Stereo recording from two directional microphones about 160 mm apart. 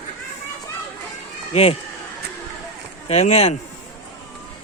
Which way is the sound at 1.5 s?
40° left (ahead or behind).